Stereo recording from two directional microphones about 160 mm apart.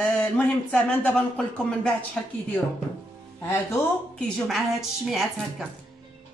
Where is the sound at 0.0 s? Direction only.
5° left (ahead or behind).